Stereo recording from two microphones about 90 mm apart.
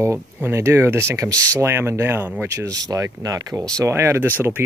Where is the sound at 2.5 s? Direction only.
35° right (ahead or behind).